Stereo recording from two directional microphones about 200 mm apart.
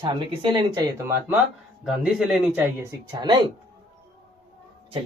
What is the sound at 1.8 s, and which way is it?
Speech, 5° right (ahead or behind).